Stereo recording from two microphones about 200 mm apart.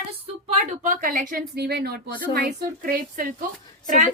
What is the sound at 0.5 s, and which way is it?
Speech, 40° right (ahead or behind).